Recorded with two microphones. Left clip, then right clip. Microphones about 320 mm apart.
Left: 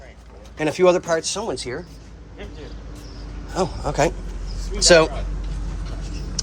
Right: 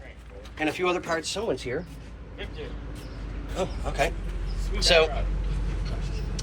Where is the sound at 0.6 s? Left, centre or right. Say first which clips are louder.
Left 9 dB; centre.